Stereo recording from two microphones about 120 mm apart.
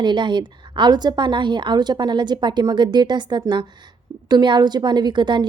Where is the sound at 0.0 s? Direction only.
40° right (ahead or behind).